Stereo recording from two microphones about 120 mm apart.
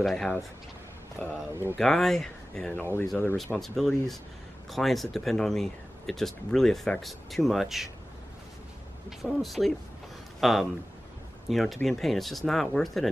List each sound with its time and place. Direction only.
0.0 s speech: 5° left (ahead or behind)
1.2 s speech: 15° left (ahead or behind)
1.5 s speech: 20° right (ahead or behind)
1.8 s speech: 5° left (ahead or behind)
9.2 s speech: centre (ahead or behind)